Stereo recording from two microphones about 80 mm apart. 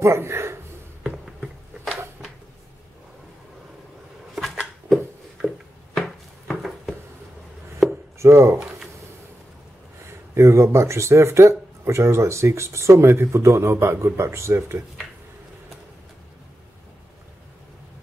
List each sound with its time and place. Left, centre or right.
0.0 s a man's voice: right
1.0 s a sound: centre
4.8 s a sound: centre
7.8 s chopping: centre
8.2 s speech: right
10.0 s speech: right